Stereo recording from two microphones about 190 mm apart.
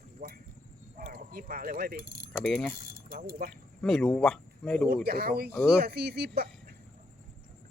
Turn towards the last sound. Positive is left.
turn(degrees=-55)  # may be behind; listen again after turning